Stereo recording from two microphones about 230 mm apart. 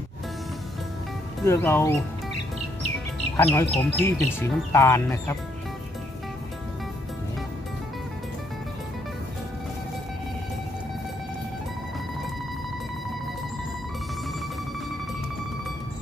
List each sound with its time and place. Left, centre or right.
1.4 s speech: centre
3.3 s speech: centre